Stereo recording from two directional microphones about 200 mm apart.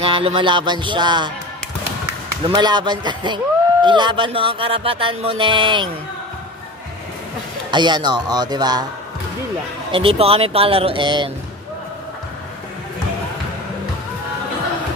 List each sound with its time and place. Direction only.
0.0 s music: 30° right (ahead or behind)
2.4 s music: 20° right (ahead or behind)
7.7 s music: 20° right (ahead or behind)
9.8 s music: 25° right (ahead or behind)